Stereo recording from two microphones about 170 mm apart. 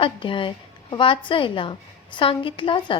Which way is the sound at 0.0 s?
30° left (ahead or behind).